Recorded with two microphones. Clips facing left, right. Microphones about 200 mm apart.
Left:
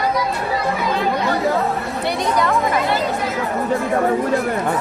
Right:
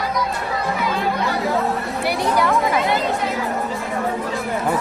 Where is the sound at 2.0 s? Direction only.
5° right (ahead or behind).